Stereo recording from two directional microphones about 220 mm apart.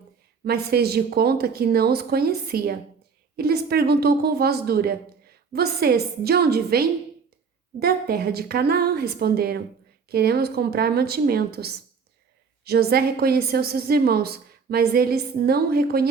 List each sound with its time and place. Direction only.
0.4 s a woman's voice: 45° right (ahead or behind)